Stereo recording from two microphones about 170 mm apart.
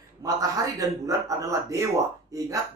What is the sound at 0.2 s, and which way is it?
Speech, 20° right (ahead or behind).